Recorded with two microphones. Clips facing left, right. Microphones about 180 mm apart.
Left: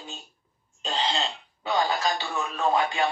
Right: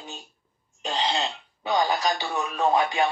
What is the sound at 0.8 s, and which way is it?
Throat clearing, 20° right (ahead or behind).